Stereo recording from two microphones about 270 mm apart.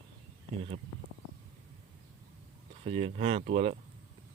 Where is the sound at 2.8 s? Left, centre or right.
Right.